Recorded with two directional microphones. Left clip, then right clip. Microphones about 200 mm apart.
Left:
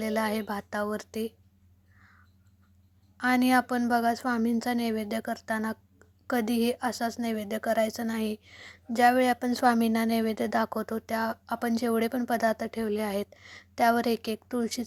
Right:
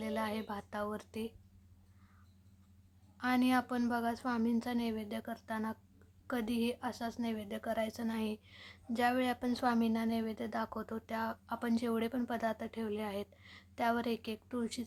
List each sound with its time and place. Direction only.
0.0 s a woman's voice: 25° left (ahead or behind)
3.2 s a woman's voice: 30° left (ahead or behind)